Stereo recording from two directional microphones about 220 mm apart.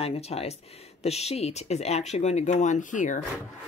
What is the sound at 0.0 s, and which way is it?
Speech, 25° left (ahead or behind).